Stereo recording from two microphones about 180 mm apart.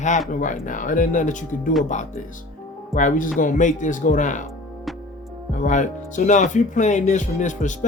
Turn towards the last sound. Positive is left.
turn(degrees=45)  # may be behind; listen again after turning